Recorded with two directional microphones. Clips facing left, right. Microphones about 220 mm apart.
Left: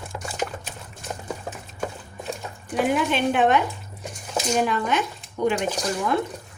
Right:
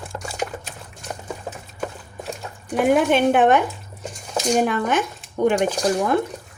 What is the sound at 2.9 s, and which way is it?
A woman's voice, 50° right (ahead or behind).